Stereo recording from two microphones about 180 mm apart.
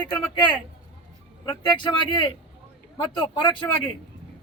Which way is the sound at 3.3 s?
25° left (ahead or behind).